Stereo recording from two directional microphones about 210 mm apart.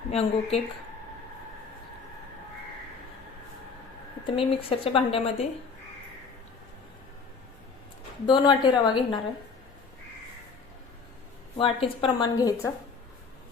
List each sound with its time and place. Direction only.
0.1 s speech: 30° left (ahead or behind)
4.3 s speech: 25° left (ahead or behind)
8.3 s speech: 20° left (ahead or behind)
11.5 s speech: 25° left (ahead or behind)